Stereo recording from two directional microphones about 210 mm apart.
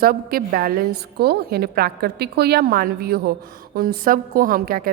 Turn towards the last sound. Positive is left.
turn(degrees=-45)  # may be behind; listen again after turning